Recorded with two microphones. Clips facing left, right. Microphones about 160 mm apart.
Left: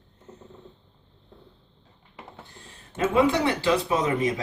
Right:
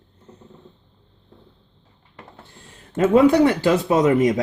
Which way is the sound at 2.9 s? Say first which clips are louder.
Right 7 dB; 45° right (ahead or behind).